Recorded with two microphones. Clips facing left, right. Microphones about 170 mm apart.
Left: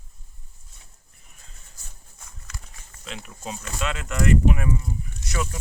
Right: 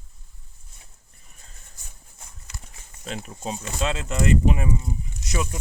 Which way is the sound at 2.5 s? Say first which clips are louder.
Left 1 dB; 25° right (ahead or behind).